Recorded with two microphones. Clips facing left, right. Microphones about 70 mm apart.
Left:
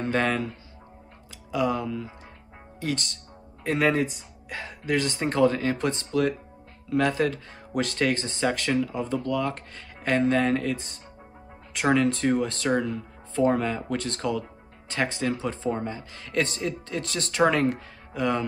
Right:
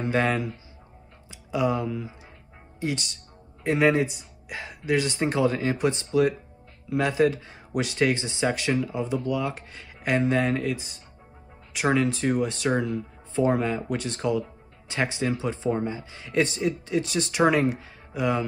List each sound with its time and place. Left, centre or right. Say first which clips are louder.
0.0 s speech: right 1 dB; centre